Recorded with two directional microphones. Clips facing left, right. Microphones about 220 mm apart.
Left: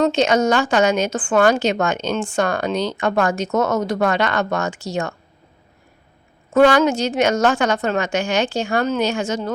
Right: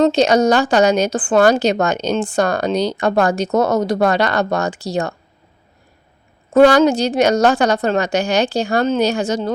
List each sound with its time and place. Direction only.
0.0 s a woman's voice: 35° right (ahead or behind)
6.5 s a woman's voice: 35° right (ahead or behind)